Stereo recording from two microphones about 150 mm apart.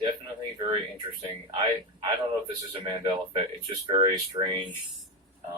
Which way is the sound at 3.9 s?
35° right (ahead or behind).